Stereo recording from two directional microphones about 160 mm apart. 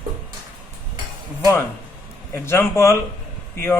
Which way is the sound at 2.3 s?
15° left (ahead or behind).